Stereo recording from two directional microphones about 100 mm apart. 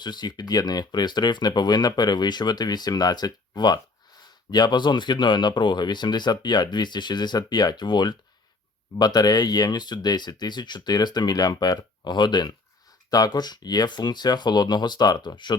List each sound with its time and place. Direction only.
0.0 s speech: 45° left (ahead or behind)